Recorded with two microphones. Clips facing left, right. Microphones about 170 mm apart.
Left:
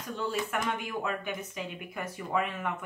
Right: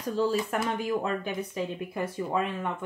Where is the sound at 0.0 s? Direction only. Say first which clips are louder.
Right 6 dB; 35° right (ahead or behind).